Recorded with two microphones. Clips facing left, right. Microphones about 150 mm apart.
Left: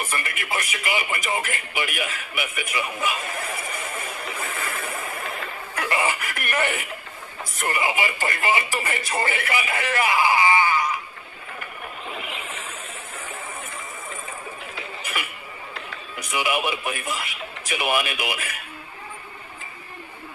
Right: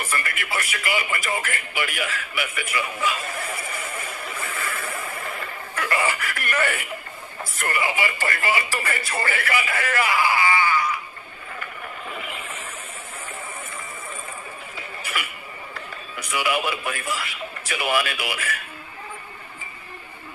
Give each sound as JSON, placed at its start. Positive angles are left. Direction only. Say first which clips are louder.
{"t": 0.1, "sound": "speech", "louder": "right 1 dB", "side_deg": 20}
{"t": 3.9, "sound": "vehicle", "louder": "left 1 dB", "side_deg": 20}
{"t": 4.9, "sound": "a sound", "louder": "even", "side_deg": 20}
{"t": 7.6, "sound": "speech", "louder": "left 1 dB", "side_deg": 20}
{"t": 16.1, "sound": "speech", "louder": "even", "side_deg": 20}